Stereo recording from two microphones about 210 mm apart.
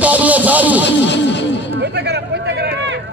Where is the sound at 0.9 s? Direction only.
55° left (ahead or behind).